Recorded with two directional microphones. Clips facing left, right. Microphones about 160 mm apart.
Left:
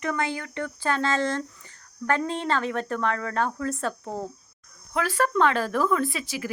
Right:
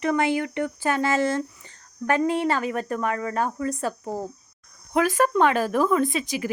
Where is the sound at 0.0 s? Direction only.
20° right (ahead or behind).